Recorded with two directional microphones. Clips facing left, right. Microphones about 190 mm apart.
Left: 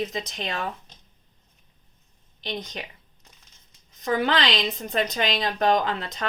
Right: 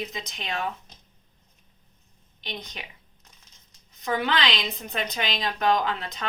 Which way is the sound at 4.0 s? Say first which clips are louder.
Left 3 dB; 45° left (ahead or behind).